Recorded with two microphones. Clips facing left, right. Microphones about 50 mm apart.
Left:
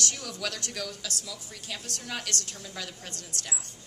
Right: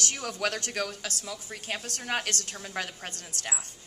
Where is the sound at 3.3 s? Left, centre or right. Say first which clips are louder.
Right 2 dB; left.